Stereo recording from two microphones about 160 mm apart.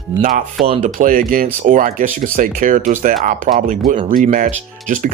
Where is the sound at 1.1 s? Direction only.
60° right (ahead or behind).